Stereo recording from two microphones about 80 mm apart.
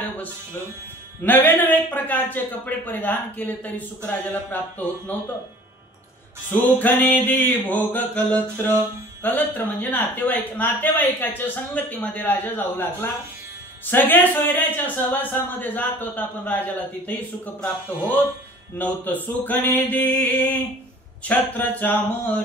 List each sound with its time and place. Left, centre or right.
1.2 s a man's voice: left
6.5 s a man's voice: left
17.8 s a man's voice: left